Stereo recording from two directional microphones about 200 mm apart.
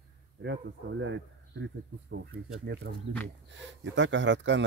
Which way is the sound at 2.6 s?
55° right (ahead or behind).